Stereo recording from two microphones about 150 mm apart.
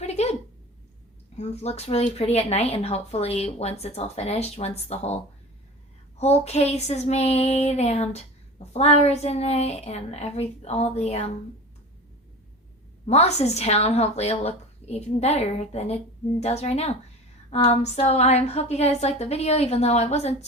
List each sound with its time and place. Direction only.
0.0 s a sound: 45° left (ahead or behind)
1.4 s child singing: 45° left (ahead or behind)
13.1 s child singing: 45° left (ahead or behind)